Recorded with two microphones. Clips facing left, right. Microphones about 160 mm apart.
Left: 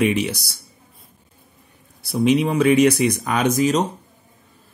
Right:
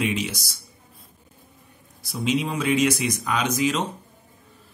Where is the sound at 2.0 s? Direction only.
60° left (ahead or behind).